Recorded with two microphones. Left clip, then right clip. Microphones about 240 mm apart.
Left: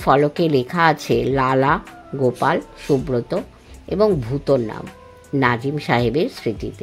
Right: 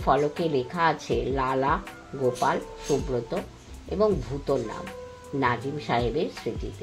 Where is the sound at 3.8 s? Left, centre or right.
Left.